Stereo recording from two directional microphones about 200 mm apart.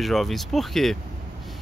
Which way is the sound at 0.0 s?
Centre (ahead or behind).